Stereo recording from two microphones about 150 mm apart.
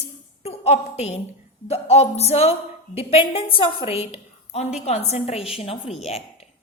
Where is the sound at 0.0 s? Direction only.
45° left (ahead or behind).